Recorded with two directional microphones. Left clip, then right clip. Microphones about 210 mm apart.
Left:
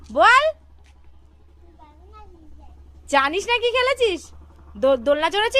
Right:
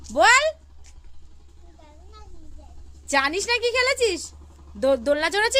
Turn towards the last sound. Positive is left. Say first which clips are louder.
# left 2 dB
turn(degrees=0)  # may be behind; listen again after turning